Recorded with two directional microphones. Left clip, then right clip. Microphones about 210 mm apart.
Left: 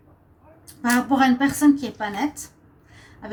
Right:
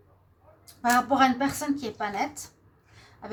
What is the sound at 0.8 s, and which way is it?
Speech, 35° right (ahead or behind).